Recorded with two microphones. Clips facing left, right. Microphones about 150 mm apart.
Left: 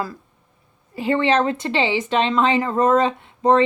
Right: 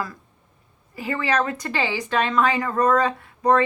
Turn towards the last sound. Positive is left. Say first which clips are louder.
# left 3 dB
turn(degrees=25)  # may be behind; listen again after turning